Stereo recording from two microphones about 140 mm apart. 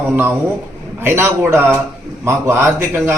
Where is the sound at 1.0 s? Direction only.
15° right (ahead or behind).